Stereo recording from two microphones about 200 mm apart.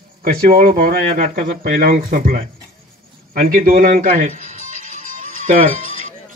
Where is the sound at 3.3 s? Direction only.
45° right (ahead or behind).